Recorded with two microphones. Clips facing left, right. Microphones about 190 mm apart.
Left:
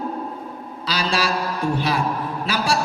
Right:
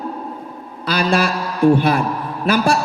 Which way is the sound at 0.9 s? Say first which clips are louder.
Right 5 dB; 55° right (ahead or behind).